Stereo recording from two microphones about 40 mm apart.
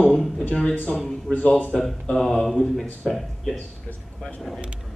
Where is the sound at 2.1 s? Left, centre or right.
Centre.